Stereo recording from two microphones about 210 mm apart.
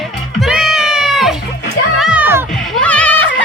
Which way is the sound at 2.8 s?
5° left (ahead or behind).